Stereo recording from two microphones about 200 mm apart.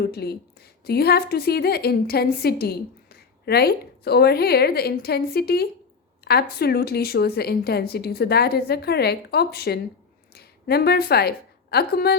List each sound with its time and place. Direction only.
0.0 s a woman's voice: 55° left (ahead or behind)